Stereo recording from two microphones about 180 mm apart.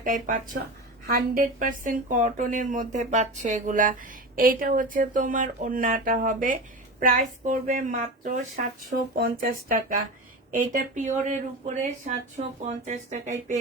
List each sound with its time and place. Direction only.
0.0 s speech: 50° right (ahead or behind)